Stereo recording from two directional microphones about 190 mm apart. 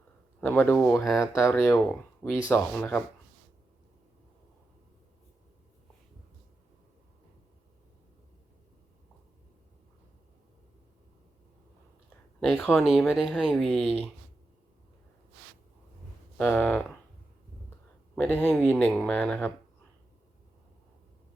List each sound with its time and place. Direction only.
0.4 s speech: 10° left (ahead or behind)
12.4 s speech: 5° left (ahead or behind)
16.4 s speech: 5° left (ahead or behind)
18.1 s speech: 10° left (ahead or behind)